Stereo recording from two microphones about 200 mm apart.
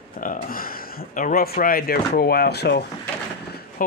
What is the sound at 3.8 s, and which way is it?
Speech, 40° left (ahead or behind).